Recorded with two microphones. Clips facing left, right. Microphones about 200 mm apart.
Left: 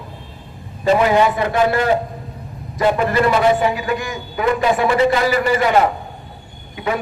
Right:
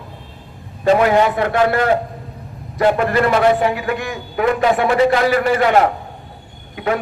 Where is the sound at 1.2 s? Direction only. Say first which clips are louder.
Right 1 dB; 60° right (ahead or behind).